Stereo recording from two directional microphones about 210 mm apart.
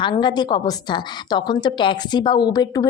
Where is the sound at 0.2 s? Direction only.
20° left (ahead or behind).